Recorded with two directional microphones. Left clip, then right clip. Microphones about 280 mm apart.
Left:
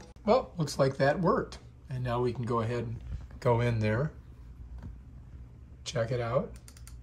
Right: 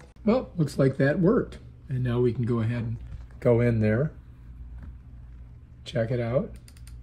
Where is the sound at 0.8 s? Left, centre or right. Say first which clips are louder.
Right 3 dB; right.